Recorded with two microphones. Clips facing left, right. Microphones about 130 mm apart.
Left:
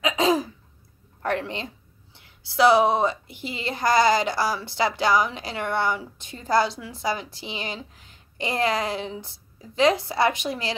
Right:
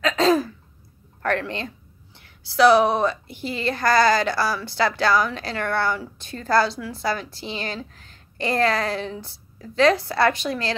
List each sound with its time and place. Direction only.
0.0 s throat clearing: 15° left (ahead or behind)
1.2 s a woman's voice: 20° left (ahead or behind)